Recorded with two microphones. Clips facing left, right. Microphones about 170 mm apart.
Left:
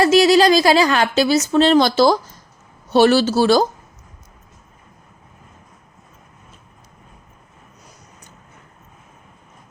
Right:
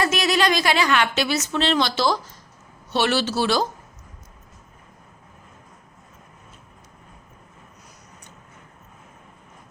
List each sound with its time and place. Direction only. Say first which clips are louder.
0.0 s a woman's voice: left 9 dB; 35° left (ahead or behind)